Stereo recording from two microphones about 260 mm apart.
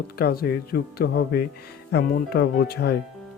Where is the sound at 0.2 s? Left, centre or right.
Left.